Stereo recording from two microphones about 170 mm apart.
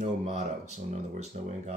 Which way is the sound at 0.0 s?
45° right (ahead or behind).